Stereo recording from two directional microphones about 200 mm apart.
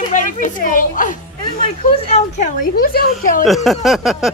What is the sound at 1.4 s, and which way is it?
Speech, 30° left (ahead or behind).